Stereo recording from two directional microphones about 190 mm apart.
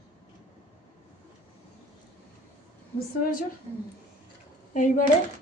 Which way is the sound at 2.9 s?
50° left (ahead or behind).